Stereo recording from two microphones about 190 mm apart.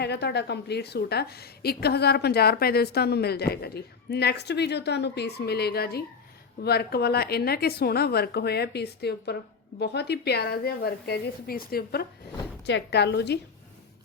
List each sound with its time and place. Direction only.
0.0 s a woman's voice: 60° left (ahead or behind)